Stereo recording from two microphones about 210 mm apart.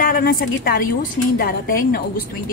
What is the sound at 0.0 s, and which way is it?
A woman's voice, 45° left (ahead or behind).